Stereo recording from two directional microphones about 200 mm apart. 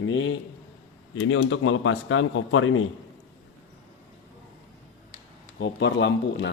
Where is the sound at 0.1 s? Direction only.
75° left (ahead or behind); by 2.8 s 90° left.